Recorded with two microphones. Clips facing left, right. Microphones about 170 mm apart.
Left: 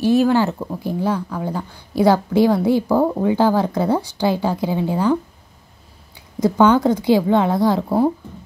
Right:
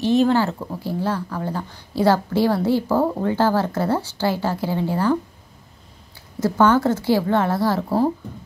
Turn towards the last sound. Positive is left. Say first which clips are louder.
# left 3 dB
turn(degrees=15)  # may be behind; listen again after turning